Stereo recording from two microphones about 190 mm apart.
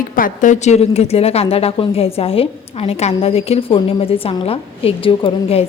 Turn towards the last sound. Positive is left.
turn(degrees=30)  # may be behind; listen again after turning